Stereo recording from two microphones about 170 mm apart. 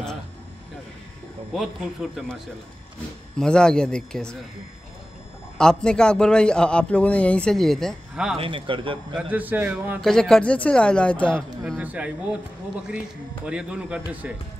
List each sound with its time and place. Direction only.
1.5 s a man's voice: centre (ahead or behind)
5.6 s a man's voice: 5° left (ahead or behind)
8.4 s speech: 30° right (ahead or behind)
9.1 s a man's voice: 10° right (ahead or behind)
10.0 s a man's voice: 5° left (ahead or behind)
11.8 s a man's voice: 10° right (ahead or behind)
13.5 s a man's voice: 5° right (ahead or behind)